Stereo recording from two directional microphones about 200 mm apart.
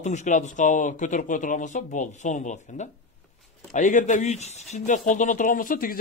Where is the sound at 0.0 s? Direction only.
35° left (ahead or behind).